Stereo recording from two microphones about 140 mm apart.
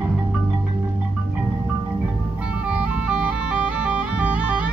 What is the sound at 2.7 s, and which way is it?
Music, 10° right (ahead or behind).